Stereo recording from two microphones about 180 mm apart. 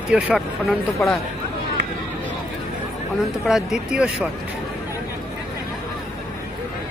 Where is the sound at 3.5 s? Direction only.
Centre (ahead or behind).